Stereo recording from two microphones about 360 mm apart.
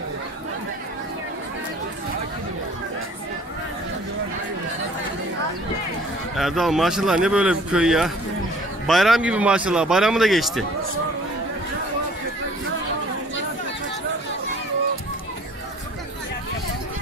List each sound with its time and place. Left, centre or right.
6.3 s speech: centre